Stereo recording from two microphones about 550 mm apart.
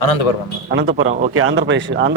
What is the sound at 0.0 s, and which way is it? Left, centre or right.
Speech, left.